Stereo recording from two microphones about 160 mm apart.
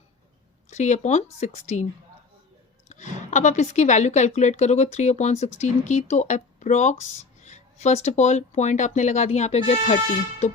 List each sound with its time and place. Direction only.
0.7 s speech: 45° left (ahead or behind)
2.9 s speech: 50° left (ahead or behind)